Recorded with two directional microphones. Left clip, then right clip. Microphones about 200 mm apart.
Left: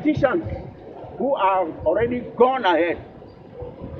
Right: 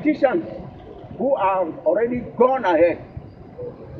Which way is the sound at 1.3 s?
15° right (ahead or behind).